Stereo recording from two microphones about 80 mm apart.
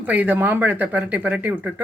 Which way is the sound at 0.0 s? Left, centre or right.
Right.